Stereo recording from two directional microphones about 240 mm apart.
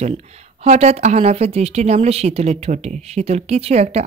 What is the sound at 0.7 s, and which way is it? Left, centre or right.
Speech, right.